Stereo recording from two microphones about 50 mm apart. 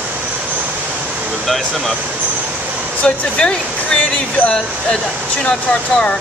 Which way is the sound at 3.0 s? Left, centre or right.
Centre.